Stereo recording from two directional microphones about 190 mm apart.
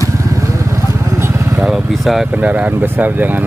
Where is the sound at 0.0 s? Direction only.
15° right (ahead or behind).